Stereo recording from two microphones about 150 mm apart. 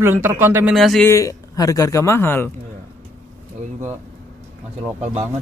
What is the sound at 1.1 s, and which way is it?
Speech, 20° left (ahead or behind).